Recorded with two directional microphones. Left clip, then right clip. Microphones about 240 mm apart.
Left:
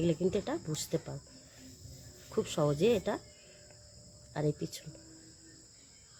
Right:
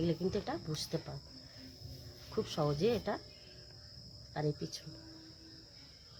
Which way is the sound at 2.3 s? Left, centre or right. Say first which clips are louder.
Left 4 dB; left.